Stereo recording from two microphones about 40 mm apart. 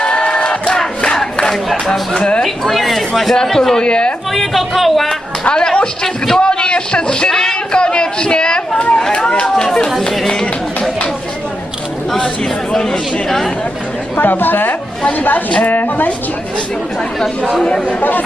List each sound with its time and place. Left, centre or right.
0.0 s crowd: left
2.4 s a sound: centre
3.3 s speech: centre
3.8 s a woman's voice: left
4.4 s speech: centre
5.5 s a sound: centre
7.3 s a sound: centre
7.7 s chatter: left
9.1 s run: left
9.6 s a sound: centre
12.7 s speech: centre
14.2 s a woman's voice: left